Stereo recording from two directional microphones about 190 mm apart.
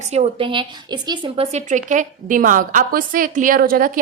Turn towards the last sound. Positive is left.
turn(degrees=-50)  # may be behind; listen again after turning